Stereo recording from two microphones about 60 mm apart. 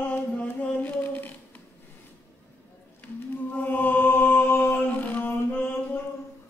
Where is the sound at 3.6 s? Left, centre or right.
Left.